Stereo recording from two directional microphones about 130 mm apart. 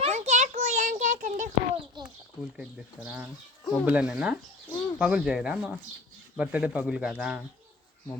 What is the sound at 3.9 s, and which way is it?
Speech, 10° right (ahead or behind).